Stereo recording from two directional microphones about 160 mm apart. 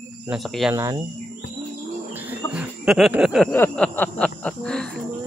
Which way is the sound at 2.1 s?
10° right (ahead or behind).